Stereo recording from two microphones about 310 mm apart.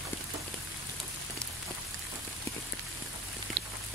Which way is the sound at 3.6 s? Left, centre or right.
Right.